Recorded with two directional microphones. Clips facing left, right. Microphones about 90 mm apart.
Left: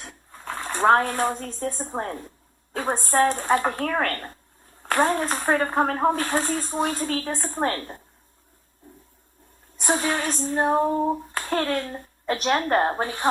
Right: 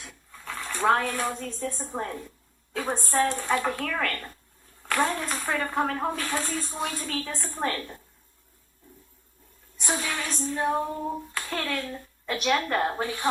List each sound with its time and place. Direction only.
0.0 s speech: 40° left (ahead or behind)
2.7 s clapping: 40° left (ahead or behind)
4.8 s speech: 45° left (ahead or behind)
9.7 s clapping: 45° left (ahead or behind)